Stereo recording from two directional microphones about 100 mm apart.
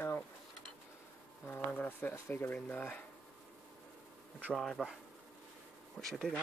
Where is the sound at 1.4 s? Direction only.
20° left (ahead or behind).